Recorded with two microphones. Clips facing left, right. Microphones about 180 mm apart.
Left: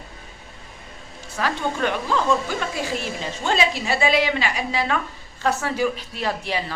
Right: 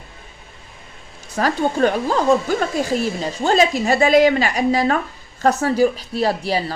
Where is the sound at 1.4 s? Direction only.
40° right (ahead or behind).